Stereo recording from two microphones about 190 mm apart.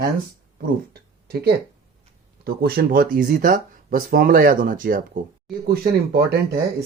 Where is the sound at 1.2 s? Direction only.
55° right (ahead or behind).